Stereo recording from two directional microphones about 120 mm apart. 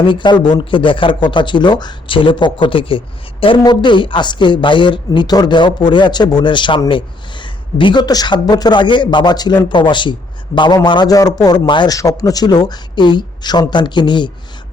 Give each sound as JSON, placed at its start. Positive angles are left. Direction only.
{"t": 0.0, "sound": "a woman's voice", "side_deg": 40}